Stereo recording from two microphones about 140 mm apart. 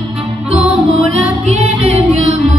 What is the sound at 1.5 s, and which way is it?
Music, 50° right (ahead or behind).